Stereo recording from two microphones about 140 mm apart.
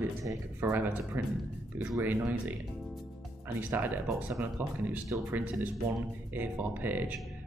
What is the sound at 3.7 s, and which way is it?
Speech, 15° right (ahead or behind).